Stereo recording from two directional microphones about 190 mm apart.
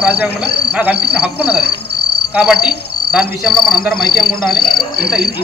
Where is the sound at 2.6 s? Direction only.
5° right (ahead or behind).